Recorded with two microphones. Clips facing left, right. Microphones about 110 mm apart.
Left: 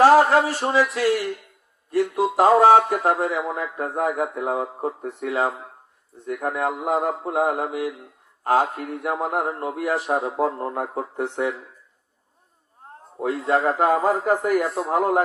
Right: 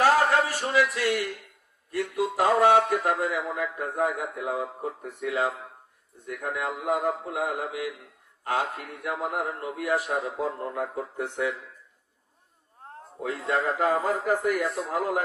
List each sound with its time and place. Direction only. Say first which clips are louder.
0.0 s a man's voice: left 7 dB; 30° left (ahead or behind); by 7.8 s 45° left (ahead or behind)
7.8 s a man's voice: left 5 dB; 30° left (ahead or behind)
9.1 s a man's voice: left 4 dB; 45° left (ahead or behind)
13.2 s a man's voice: left 6 dB; 40° left (ahead or behind)